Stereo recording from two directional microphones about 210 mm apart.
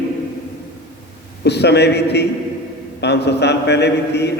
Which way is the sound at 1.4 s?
55° left (ahead or behind).